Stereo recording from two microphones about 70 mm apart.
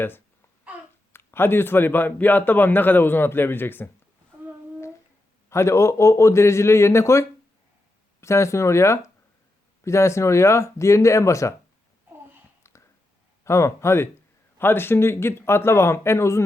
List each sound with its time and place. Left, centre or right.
0.7 s babbling: centre
1.1 s a man's voice: left
5.5 s speech: left
12.7 s a sound: left
13.4 s speech: left